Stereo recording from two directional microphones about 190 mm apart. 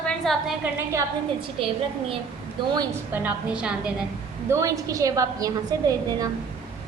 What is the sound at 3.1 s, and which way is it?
Speech, 5° right (ahead or behind).